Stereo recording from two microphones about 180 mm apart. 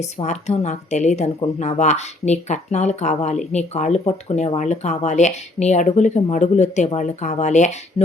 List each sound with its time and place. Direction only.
0.0 s speech: 40° left (ahead or behind)